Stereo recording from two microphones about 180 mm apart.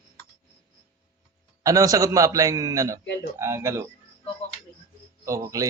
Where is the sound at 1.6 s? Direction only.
20° right (ahead or behind).